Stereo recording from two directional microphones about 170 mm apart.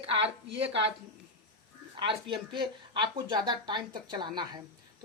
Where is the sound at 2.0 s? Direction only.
30° right (ahead or behind).